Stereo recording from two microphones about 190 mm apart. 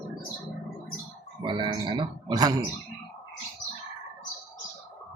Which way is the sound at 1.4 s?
25° right (ahead or behind).